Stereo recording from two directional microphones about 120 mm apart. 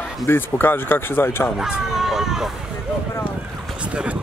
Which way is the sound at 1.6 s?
5° right (ahead or behind).